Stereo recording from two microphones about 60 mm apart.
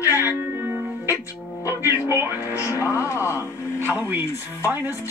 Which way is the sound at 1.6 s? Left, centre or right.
Right.